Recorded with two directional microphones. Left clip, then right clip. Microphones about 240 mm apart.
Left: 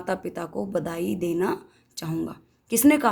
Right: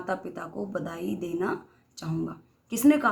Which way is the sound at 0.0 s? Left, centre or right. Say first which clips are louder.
Left 3 dB; left.